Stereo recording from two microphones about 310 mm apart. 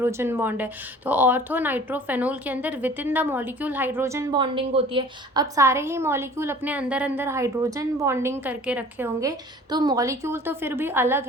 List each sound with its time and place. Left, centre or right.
0.0 s speech: centre